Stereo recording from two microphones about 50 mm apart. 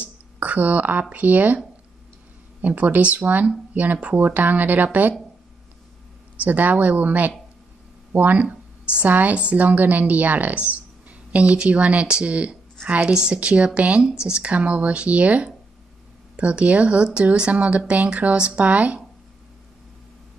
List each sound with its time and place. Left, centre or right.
0.0 s a sound: right
1.1 s speech: right
2.6 s a woman's voice: right
6.4 s a woman's voice: right
13.1 s a woman's voice: centre